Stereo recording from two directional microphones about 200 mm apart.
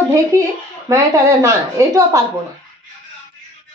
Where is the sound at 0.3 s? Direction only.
15° right (ahead or behind).